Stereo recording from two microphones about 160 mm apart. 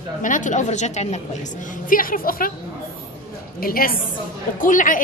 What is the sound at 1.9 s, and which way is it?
Speech, 60° left (ahead or behind).